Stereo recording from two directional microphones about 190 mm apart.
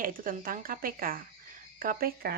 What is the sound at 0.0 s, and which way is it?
Speech, 45° right (ahead or behind).